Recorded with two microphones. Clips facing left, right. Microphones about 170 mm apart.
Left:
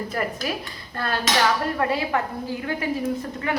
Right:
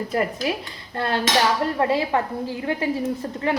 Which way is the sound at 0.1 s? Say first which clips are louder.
Right 3 dB; 25° right (ahead or behind).